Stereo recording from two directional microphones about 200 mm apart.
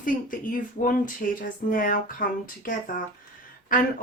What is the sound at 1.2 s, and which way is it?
Speech, 45° left (ahead or behind).